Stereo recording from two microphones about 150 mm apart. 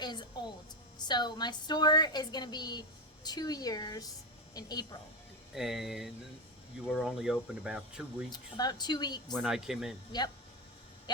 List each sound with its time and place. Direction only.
0.0 s a woman's voice: 30° left (ahead or behind)
5.5 s speech: centre (ahead or behind)
8.3 s a woman's voice: 30° left (ahead or behind)
9.4 s speech: 5° right (ahead or behind)
10.1 s a woman's voice: 30° left (ahead or behind)